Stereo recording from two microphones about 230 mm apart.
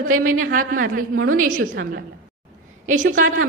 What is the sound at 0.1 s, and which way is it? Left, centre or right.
A woman's voice, right.